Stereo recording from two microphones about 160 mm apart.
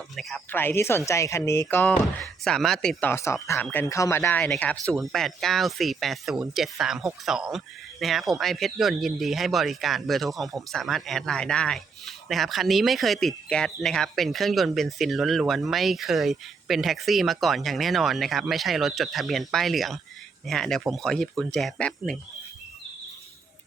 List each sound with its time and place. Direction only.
0.2 s speech: centre (ahead or behind)
0.5 s speech: 15° left (ahead or behind)
3.1 s speech: 15° left (ahead or behind)